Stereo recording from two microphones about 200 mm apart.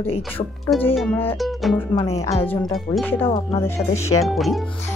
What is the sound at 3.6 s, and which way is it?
Speech, 15° left (ahead or behind).